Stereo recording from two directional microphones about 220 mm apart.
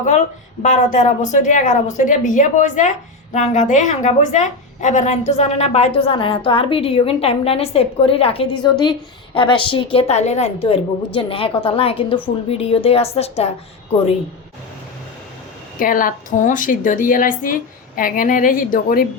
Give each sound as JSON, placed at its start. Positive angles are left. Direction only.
{"t": 0.6, "sound": "a woman's voice", "side_deg": 35}
{"t": 15.8, "sound": "a woman's voice", "side_deg": 40}